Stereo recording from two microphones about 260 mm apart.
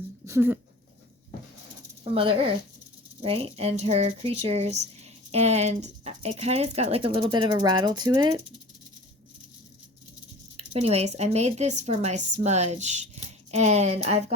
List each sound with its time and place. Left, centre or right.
0.3 s speech: centre
2.1 s speech: right
10.7 s speech: right